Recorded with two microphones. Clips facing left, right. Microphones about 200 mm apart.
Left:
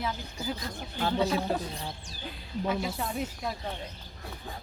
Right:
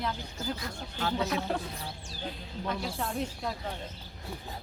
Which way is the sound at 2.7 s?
5° left (ahead or behind).